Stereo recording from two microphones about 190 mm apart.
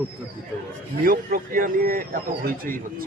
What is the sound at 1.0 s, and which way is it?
Speech, 50° right (ahead or behind).